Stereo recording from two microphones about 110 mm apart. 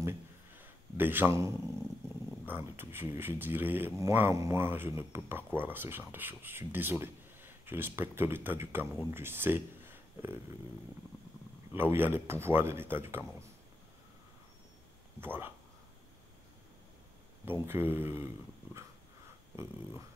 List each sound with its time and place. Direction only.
0.0 s a sound: 20° right (ahead or behind)
2.4 s speech: 20° right (ahead or behind)
11.7 s speech: 20° right (ahead or behind)
15.1 s speech: 20° right (ahead or behind)
17.5 s speech: 20° right (ahead or behind)